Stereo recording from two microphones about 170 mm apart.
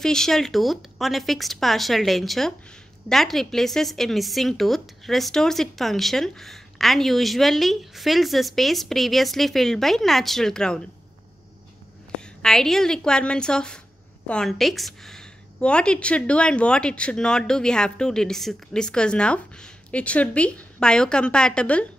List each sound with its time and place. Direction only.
0.0 s a woman's voice: 5° left (ahead or behind)
12.4 s a woman's voice: 5° left (ahead or behind)